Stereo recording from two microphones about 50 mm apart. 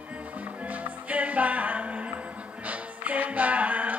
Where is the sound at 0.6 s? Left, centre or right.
Right.